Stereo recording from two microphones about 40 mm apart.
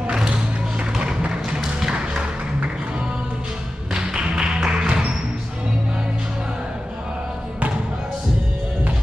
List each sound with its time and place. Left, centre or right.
0.7 s music: right
3.9 s music: right